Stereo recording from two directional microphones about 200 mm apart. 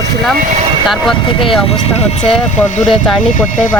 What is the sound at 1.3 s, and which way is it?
Speech, 25° left (ahead or behind).